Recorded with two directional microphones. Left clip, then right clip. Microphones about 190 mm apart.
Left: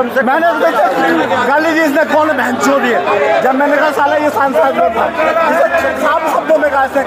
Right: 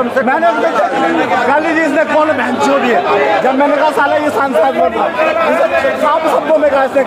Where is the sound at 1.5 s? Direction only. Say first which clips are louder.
Left 1 dB; 40° left (ahead or behind).